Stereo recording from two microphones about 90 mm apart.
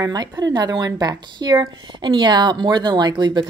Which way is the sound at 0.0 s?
45° right (ahead or behind).